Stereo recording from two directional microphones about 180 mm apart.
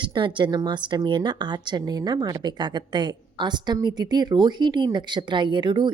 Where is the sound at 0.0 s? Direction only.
25° right (ahead or behind).